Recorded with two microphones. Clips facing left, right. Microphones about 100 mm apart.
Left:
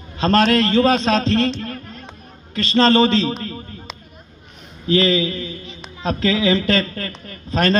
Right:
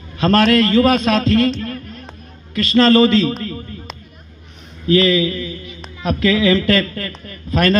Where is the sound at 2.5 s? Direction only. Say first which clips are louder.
Right 3 dB; 25° left (ahead or behind).